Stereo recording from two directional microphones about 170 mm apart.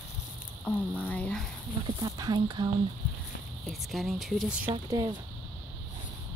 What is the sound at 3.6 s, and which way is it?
Speech, centre (ahead or behind).